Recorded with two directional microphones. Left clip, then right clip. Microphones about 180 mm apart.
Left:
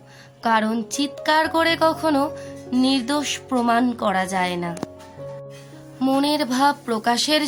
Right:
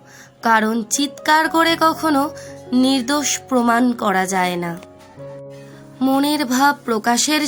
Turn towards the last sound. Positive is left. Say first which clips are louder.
# right 2 dB
turn(degrees=-25)  # may be behind; listen again after turning